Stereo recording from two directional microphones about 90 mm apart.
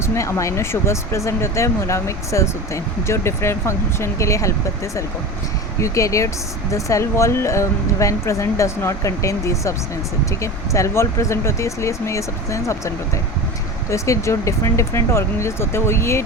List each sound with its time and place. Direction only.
0.0 s speech: 30° left (ahead or behind)
5.8 s speech: 35° left (ahead or behind)
13.9 s speech: 35° left (ahead or behind)